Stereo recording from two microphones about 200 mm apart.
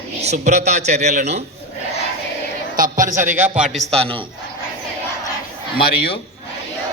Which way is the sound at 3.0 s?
15° right (ahead or behind).